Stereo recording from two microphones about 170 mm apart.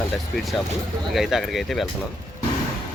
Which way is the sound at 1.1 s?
Centre (ahead or behind).